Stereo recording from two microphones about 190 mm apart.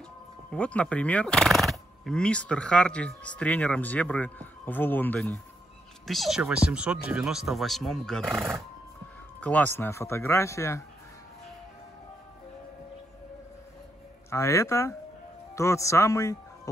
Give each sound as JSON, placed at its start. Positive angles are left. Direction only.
{"t": 0.5, "sound": "speech", "side_deg": 5}
{"t": 14.3, "sound": "speech", "side_deg": 15}